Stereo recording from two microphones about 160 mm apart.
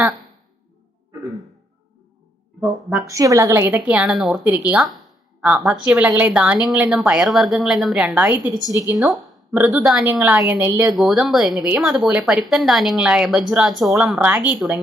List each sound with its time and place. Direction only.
2.6 s speech: 5° right (ahead or behind)
3.1 s a woman's voice: 20° right (ahead or behind)
10.9 s speech: centre (ahead or behind)